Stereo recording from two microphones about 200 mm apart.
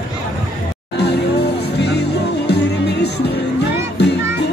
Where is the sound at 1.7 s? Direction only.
55° left (ahead or behind).